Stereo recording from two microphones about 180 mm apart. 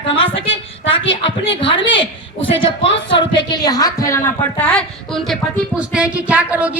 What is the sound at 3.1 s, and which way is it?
A woman's voice, 25° left (ahead or behind).